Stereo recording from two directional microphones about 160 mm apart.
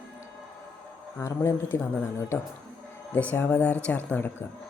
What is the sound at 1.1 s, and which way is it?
Speech, 15° left (ahead or behind).